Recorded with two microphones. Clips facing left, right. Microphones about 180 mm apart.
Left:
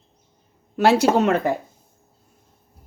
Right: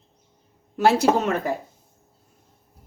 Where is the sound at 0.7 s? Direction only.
70° left (ahead or behind).